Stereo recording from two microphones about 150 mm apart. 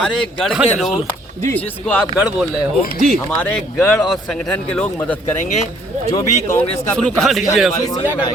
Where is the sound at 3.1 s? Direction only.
5° left (ahead or behind).